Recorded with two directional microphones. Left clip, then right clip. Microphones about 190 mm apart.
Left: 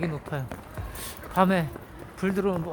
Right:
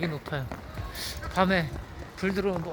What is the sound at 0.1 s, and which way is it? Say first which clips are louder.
Speech: even; 10° left (ahead or behind).